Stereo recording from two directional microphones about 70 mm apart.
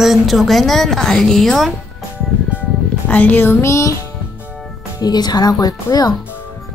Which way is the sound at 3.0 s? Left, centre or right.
Left.